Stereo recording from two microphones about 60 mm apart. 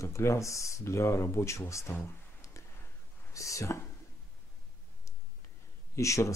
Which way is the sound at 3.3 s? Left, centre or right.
Left.